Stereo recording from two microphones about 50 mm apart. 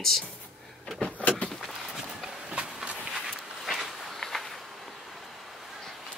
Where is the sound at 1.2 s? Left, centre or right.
Left.